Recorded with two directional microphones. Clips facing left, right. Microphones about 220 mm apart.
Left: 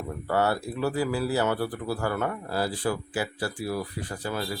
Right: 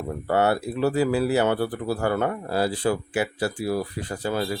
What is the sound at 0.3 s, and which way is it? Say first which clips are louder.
Speech: right 4 dB; 25° right (ahead or behind).